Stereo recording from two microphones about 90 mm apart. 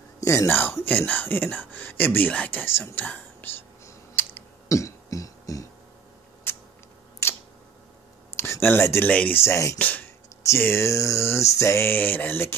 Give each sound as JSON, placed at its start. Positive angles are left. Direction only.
{"t": 0.2, "sound": "a sound", "side_deg": 35}
{"t": 0.5, "sound": "speech", "side_deg": 25}
{"t": 3.8, "sound": "typing", "side_deg": 25}
{"t": 4.7, "sound": "music", "side_deg": 35}
{"t": 6.5, "sound": "a sound", "side_deg": 25}
{"t": 8.4, "sound": "speech", "side_deg": 25}
{"t": 9.4, "sound": "speech", "side_deg": 35}
{"t": 9.8, "sound": "speech", "side_deg": 20}